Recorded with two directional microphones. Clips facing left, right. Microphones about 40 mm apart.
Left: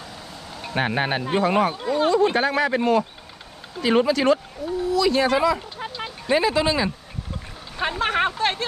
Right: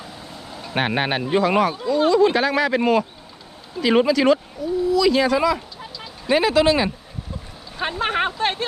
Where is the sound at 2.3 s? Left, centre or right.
Right.